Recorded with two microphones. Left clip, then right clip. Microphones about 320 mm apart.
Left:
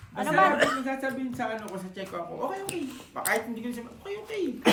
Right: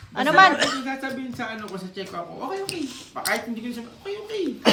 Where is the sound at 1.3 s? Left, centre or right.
Centre.